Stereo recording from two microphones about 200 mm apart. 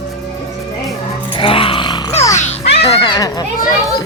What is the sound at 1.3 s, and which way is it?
Grunt, 25° left (ahead or behind).